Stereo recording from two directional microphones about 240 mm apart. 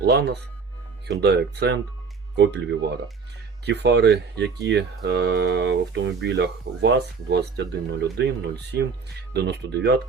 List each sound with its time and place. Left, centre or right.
0.0 s speech: right